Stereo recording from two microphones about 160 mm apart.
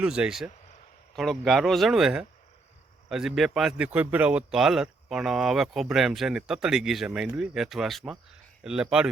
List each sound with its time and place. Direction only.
0.0 s speech: 5° right (ahead or behind)